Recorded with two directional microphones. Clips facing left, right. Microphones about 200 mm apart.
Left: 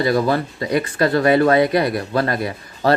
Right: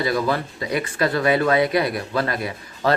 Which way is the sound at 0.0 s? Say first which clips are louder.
Left 4 dB; 40° left (ahead or behind).